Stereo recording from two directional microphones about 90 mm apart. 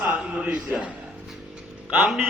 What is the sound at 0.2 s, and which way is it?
Speech, 10° right (ahead or behind).